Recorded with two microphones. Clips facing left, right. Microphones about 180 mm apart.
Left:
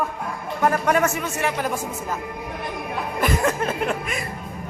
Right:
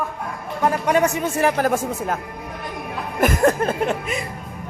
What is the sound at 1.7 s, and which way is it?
Speech, 60° right (ahead or behind).